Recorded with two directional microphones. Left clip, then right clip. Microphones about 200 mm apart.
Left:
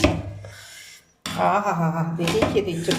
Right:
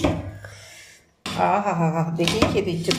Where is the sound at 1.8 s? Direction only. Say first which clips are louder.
Right 3 dB; 20° right (ahead or behind).